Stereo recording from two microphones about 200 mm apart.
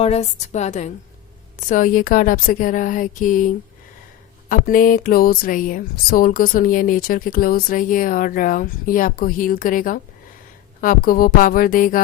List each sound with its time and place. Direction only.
0.0 s speech: 30° left (ahead or behind)